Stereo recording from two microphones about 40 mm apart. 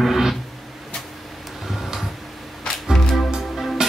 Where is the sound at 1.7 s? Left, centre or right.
Centre.